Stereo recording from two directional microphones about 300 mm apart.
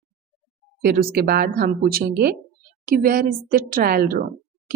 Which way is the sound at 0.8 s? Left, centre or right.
Right.